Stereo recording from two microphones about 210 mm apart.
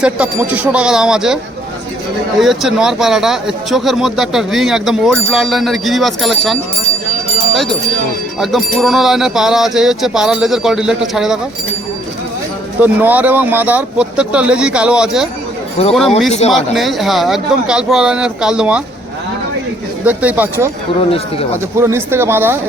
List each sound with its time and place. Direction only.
0.0 s speech: 5° right (ahead or behind)
2.4 s speech: centre (ahead or behind)
8.4 s speech: centre (ahead or behind)
12.8 s speech: 10° right (ahead or behind)
15.8 s speech: 30° left (ahead or behind)
16.5 s speech: centre (ahead or behind)
20.1 s speech: 10° right (ahead or behind)
21.8 s speech: 10° right (ahead or behind)